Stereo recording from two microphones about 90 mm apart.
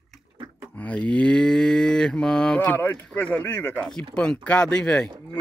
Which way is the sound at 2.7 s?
20° left (ahead or behind).